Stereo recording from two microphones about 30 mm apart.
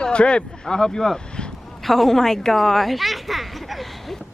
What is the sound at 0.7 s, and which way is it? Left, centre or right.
Speech, left.